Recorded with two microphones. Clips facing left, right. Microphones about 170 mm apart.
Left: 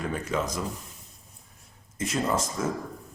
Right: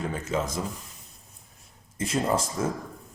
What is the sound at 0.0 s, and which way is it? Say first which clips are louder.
Speech: even; 25° right (ahead or behind).